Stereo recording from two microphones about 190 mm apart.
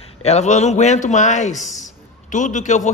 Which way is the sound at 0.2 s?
35° left (ahead or behind).